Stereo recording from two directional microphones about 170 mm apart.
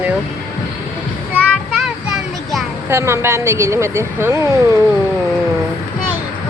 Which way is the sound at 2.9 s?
15° right (ahead or behind).